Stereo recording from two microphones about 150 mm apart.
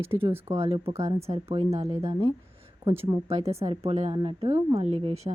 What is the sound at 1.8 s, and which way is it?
Speech, 25° right (ahead or behind).